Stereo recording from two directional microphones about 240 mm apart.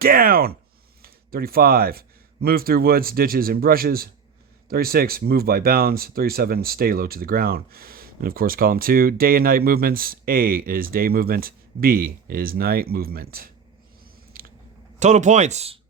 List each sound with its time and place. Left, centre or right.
0.0 s speech: right
14.3 s biting: right
14.9 s speech: right